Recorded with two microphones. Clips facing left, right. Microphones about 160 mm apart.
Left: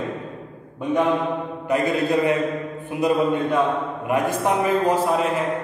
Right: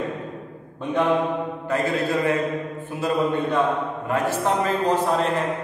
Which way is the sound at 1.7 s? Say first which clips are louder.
Left 3 dB; 15° left (ahead or behind).